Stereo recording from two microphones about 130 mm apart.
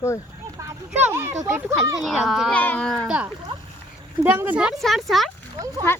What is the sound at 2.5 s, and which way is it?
Speech, 10° left (ahead or behind).